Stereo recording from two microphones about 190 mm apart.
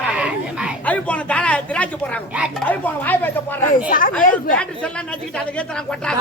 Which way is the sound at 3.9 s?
45° left (ahead or behind).